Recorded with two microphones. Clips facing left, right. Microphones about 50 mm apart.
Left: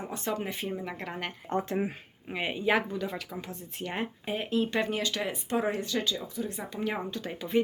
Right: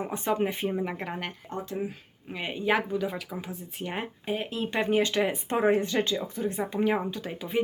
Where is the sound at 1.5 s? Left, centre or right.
Left.